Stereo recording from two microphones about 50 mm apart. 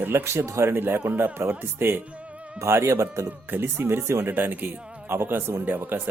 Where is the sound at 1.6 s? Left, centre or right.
Right.